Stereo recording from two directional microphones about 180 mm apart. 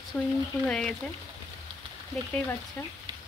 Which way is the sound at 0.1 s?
5° left (ahead or behind).